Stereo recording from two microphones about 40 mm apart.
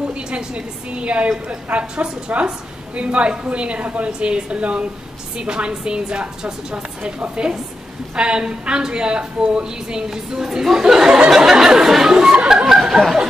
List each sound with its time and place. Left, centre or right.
0.1 s a woman's voice: right; by 12.3 s centre
12.6 s snicker: centre